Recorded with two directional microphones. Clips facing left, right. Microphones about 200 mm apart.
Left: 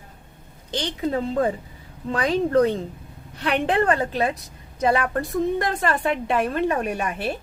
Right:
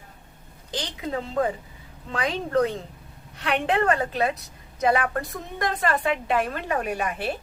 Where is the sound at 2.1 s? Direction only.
40° left (ahead or behind).